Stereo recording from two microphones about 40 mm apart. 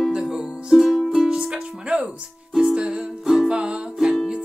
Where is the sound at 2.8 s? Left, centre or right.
Right.